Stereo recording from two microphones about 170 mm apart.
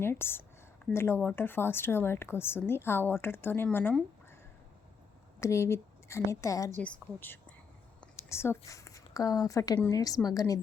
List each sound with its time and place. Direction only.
0.0 s a woman's voice: 15° left (ahead or behind)
5.4 s a woman's voice: 15° left (ahead or behind)